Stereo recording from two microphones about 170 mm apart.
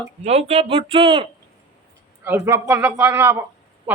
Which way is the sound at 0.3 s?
35° right (ahead or behind).